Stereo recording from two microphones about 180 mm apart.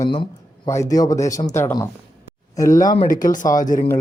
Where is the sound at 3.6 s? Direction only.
45° left (ahead or behind).